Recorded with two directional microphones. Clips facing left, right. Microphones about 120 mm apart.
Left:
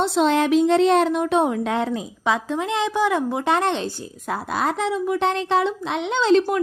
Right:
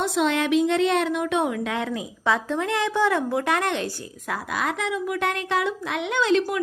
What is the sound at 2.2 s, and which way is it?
A woman's voice, 15° left (ahead or behind).